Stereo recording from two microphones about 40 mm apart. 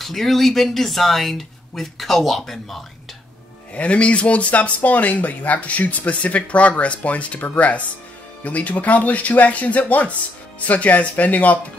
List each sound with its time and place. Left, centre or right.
0.0 s speech: centre
3.7 s speech: left